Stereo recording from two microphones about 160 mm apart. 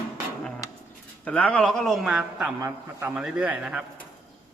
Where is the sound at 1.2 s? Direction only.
10° left (ahead or behind).